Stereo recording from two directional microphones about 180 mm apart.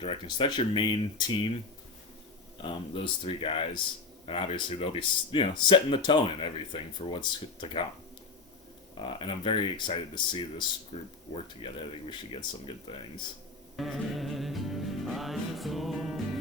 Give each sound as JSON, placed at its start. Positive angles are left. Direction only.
{"t": 0.0, "sound": "speech", "side_deg": 30}
{"t": 2.6, "sound": "speech", "side_deg": 30}
{"t": 9.1, "sound": "speech", "side_deg": 30}
{"t": 13.7, "sound": "music", "side_deg": 0}